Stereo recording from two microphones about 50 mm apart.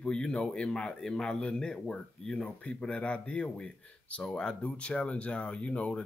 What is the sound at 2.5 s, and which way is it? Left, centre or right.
Speech, left.